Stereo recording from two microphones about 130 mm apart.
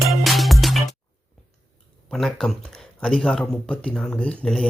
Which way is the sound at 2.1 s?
5° left (ahead or behind).